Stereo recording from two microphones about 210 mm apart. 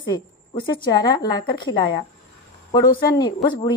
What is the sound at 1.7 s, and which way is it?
Speech, 65° left (ahead or behind).